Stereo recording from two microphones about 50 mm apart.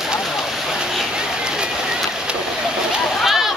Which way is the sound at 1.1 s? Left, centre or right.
Centre.